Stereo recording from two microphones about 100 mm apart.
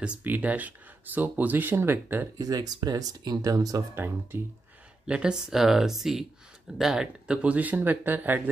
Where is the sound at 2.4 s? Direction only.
40° right (ahead or behind).